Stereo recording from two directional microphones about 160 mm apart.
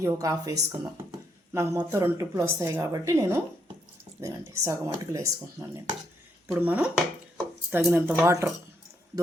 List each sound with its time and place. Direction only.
0.0 s speech: 20° right (ahead or behind)
6.5 s speech: 10° right (ahead or behind)